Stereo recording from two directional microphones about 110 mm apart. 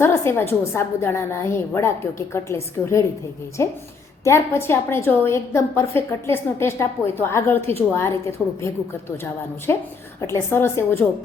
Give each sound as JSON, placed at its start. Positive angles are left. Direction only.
{"t": 0.0, "sound": "a woman's voice", "side_deg": 20}